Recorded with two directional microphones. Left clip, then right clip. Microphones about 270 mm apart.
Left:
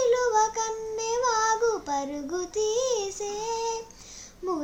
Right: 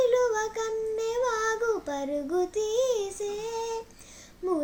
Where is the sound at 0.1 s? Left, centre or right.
Left.